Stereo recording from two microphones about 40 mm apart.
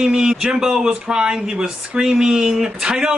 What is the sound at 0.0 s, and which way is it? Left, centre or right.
Speech, centre.